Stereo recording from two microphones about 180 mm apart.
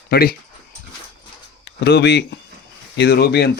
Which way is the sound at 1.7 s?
70° left (ahead or behind).